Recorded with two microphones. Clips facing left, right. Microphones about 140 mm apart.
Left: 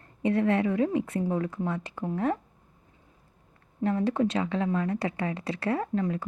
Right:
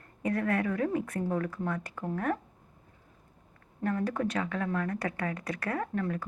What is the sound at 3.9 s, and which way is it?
A woman's voice, 25° left (ahead or behind).